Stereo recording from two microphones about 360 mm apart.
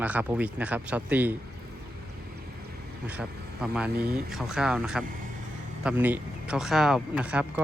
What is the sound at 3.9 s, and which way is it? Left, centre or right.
Speech, right.